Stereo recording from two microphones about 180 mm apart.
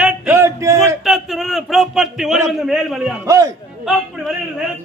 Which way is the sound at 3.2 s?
20° right (ahead or behind).